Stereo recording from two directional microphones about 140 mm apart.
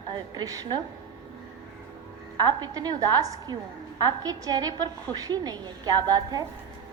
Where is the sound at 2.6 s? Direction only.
30° right (ahead or behind).